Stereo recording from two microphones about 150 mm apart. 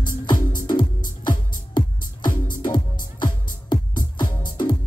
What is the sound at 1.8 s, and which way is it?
Music, 65° left (ahead or behind).